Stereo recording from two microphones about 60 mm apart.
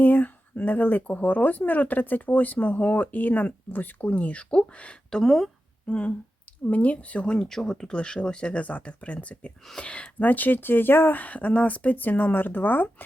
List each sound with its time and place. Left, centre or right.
0.0 s speech: left
5.1 s speech: centre
5.9 s speech: centre